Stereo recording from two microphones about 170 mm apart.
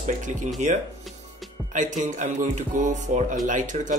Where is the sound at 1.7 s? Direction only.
50° right (ahead or behind).